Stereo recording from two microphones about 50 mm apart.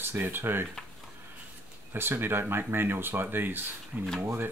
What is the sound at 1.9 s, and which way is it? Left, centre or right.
Speech, right.